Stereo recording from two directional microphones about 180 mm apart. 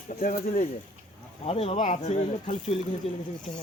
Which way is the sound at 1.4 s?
35° left (ahead or behind).